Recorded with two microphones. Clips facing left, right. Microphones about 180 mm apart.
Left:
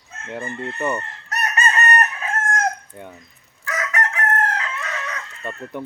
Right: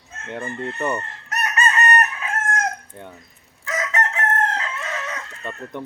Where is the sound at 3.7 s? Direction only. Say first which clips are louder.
Right 1 dB; 20° right (ahead or behind).